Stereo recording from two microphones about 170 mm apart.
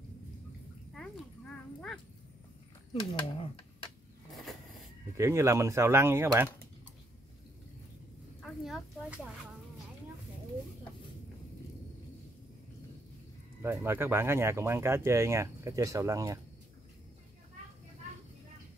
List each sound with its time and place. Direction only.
0.9 s livestock: 5° left (ahead or behind)
2.9 s speech: 35° left (ahead or behind)
5.1 s speech: 15° right (ahead or behind)
8.4 s a sound: centre (ahead or behind)
13.6 s speech: 15° right (ahead or behind)